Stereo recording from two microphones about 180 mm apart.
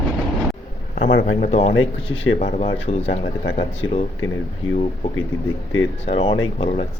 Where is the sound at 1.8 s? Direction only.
90° left.